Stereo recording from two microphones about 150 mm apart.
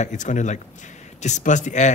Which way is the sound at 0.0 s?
55° left (ahead or behind).